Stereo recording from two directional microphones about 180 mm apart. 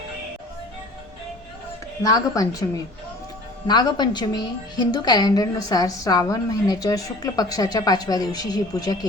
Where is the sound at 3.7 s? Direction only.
25° left (ahead or behind).